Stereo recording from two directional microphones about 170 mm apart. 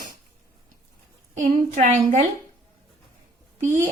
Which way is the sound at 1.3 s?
50° right (ahead or behind).